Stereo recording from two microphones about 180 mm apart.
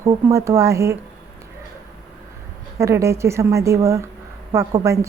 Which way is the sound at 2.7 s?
15° right (ahead or behind).